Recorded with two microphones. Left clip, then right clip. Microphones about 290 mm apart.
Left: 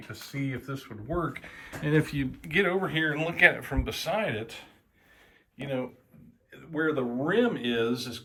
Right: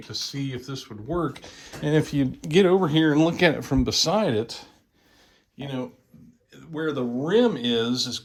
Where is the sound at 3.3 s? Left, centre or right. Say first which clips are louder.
Right 1 dB; centre.